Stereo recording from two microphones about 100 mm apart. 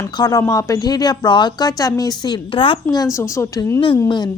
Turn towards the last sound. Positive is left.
turn(degrees=50)  # may be behind; listen again after turning